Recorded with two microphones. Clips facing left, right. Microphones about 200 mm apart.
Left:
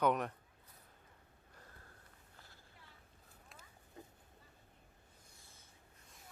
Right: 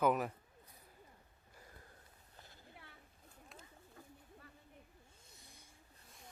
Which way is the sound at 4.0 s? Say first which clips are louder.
Left 4 dB; 20° left (ahead or behind).